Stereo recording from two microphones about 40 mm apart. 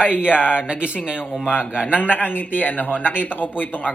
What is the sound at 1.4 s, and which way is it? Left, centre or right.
Speech, left.